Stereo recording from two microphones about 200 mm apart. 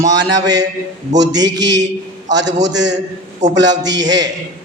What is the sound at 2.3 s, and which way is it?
A man's voice, 60° right (ahead or behind).